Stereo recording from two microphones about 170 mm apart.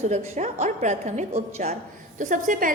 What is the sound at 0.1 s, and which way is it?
A woman's voice, 40° right (ahead or behind).